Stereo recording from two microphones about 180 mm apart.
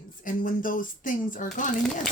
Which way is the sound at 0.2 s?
50° left (ahead or behind).